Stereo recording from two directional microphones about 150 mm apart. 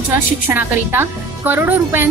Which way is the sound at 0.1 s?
15° right (ahead or behind).